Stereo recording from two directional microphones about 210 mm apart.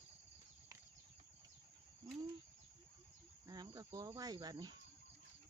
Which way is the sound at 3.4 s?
20° right (ahead or behind).